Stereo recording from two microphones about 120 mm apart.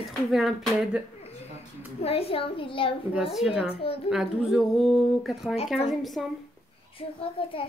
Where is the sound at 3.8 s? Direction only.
55° left (ahead or behind).